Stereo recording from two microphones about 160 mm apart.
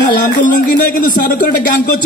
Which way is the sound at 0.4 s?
65° left (ahead or behind).